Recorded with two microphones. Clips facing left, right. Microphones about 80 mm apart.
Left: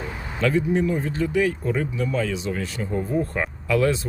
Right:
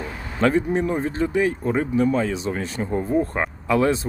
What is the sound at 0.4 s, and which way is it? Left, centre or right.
Speech, right.